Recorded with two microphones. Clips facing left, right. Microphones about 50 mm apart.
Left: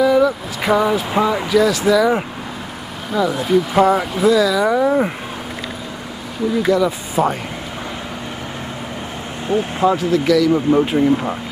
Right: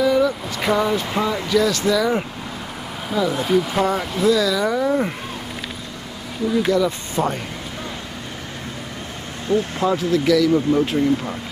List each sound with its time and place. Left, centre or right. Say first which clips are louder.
0.0 s speech: left 3 dB; centre
6.7 s speech: left 3 dB; centre
9.8 s speech: left 3 dB; centre
10.5 s speech: left 3 dB; left